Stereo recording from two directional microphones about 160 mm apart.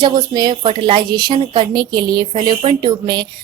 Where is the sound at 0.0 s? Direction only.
25° right (ahead or behind).